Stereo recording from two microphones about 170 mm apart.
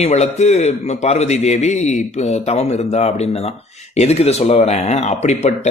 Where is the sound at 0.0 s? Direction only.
40° left (ahead or behind).